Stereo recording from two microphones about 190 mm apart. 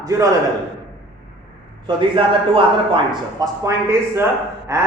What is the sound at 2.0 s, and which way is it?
A man's voice, 25° right (ahead or behind).